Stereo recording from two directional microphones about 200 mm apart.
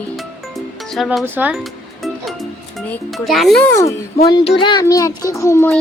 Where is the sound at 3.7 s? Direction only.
15° left (ahead or behind).